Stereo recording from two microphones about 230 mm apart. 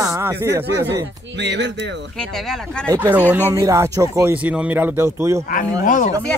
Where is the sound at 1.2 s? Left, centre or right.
Right.